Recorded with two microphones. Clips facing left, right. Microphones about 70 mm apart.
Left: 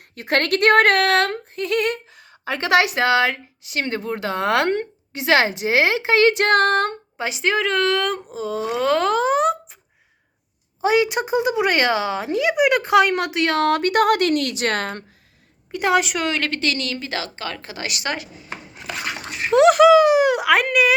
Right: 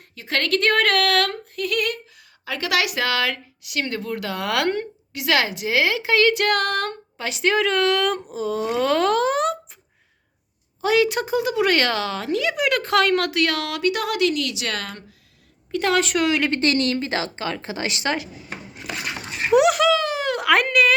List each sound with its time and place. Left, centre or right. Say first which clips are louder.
0.2 s a woman's voice: left 3 dB; left
7.3 s speech: right 1 dB; centre
10.8 s a woman's voice: left 1 dB; left
15.7 s a woman's voice: left 2 dB; centre
16.1 s speech: right 3 dB; centre
16.5 s a woman's voice: right 4 dB; right
19.5 s a sound: left 3 dB; centre
19.7 s a sound: left 8 dB; centre